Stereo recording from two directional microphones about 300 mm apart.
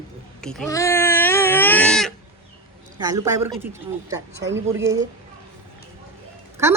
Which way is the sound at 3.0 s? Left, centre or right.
Centre.